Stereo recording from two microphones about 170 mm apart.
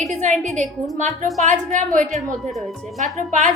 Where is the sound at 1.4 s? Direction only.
45° right (ahead or behind).